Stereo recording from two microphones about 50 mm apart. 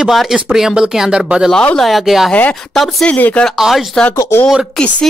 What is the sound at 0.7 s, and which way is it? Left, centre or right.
Speech, centre.